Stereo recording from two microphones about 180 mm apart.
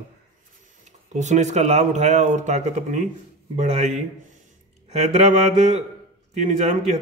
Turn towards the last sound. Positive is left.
turn(degrees=-40)  # may be behind; listen again after turning